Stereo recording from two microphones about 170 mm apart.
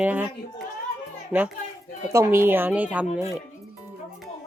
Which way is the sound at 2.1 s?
15° right (ahead or behind).